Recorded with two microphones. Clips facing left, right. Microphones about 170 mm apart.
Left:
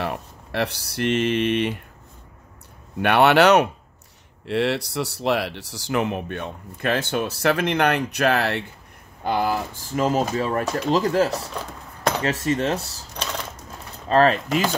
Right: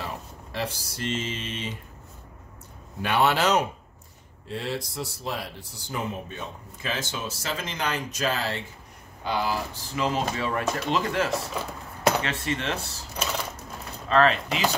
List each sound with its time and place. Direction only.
0.0 s speech: 65° left (ahead or behind)
3.0 s speech: 65° left (ahead or behind)
9.2 s speech: 50° left (ahead or behind); by 11.3 s 35° left (ahead or behind)
11.6 s cutlery: 5° right (ahead or behind)
12.2 s cutlery: 40° left (ahead or behind)
13.1 s typewriter: 5° right (ahead or behind)
14.0 s cutlery: 40° left (ahead or behind)